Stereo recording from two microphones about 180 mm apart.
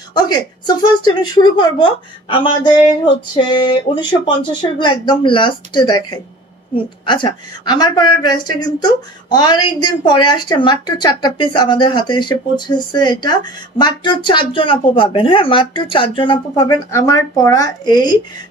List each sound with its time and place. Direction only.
0.1 s speech: 25° left (ahead or behind)
3.9 s speech: 25° left (ahead or behind)